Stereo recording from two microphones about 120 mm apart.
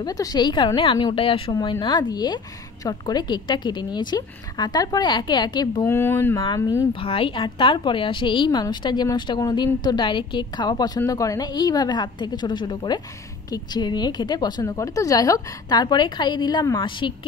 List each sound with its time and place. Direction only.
0.0 s a woman's voice: 35° left (ahead or behind)
5.9 s speech: 20° left (ahead or behind)
6.4 s a woman's voice: 35° left (ahead or behind)
6.9 s a woman's voice: 50° left (ahead or behind)